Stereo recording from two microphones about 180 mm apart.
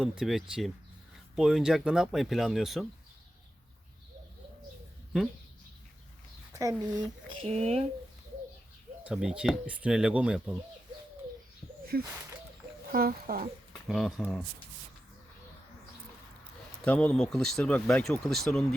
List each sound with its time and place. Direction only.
0.0 s speech: centre (ahead or behind)
6.5 s speech: 20° right (ahead or behind)
7.4 s speech: 35° right (ahead or behind)
9.0 s speech: 5° right (ahead or behind)
11.9 s speech: 60° right (ahead or behind)
13.8 s speech: centre (ahead or behind)
16.8 s speech: 5° left (ahead or behind)